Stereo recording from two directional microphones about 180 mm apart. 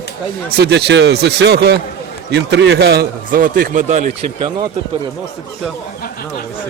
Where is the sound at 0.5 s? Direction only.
70° right (ahead or behind); by 4.1 s 45° right (ahead or behind).